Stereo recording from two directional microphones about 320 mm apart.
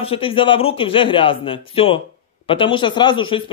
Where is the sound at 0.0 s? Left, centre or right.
Centre.